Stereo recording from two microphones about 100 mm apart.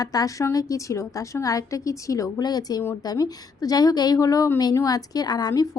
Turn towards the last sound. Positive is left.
turn(degrees=40)  # may be behind; listen again after turning